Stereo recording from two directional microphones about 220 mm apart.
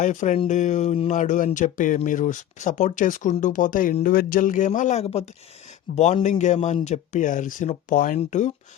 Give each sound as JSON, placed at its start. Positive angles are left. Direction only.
{"t": 0.0, "sound": "speech", "side_deg": 35}